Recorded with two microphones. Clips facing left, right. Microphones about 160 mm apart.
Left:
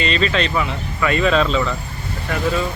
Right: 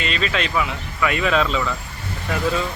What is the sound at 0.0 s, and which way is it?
Speech, 5° right (ahead or behind).